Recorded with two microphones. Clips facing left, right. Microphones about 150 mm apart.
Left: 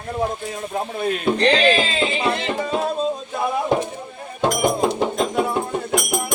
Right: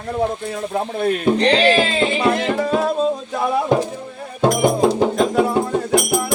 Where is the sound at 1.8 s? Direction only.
40° right (ahead or behind).